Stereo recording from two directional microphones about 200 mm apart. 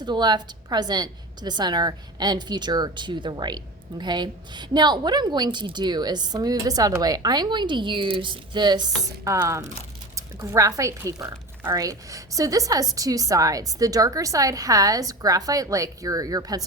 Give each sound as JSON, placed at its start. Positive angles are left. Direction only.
{"t": 0.0, "sound": "a woman's voice", "side_deg": -20}